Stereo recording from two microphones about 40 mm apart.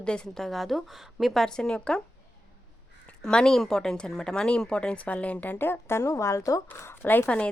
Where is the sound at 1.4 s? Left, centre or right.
Centre.